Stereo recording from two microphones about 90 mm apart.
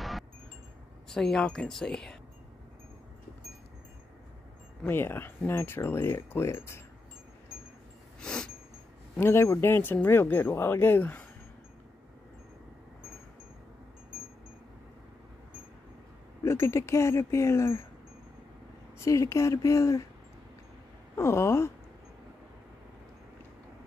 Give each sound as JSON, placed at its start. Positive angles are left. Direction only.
{"t": 1.0, "sound": "speech", "side_deg": 5}
{"t": 4.8, "sound": "speech", "side_deg": 25}
{"t": 8.2, "sound": "a sound", "side_deg": 10}
{"t": 9.2, "sound": "speech", "side_deg": 30}
{"t": 16.4, "sound": "speech", "side_deg": 30}
{"t": 18.9, "sound": "speech", "side_deg": 35}
{"t": 21.2, "sound": "speech", "side_deg": 30}